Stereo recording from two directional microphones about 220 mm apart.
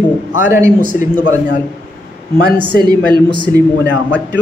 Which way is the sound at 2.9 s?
20° right (ahead or behind).